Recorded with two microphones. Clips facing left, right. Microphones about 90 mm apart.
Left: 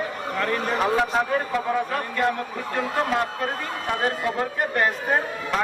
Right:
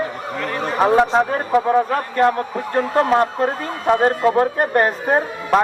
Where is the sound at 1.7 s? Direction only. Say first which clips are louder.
Right 8 dB; 40° right (ahead or behind).